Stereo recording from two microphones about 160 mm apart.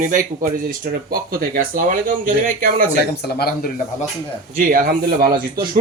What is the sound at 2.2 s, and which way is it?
Speech, 60° right (ahead or behind).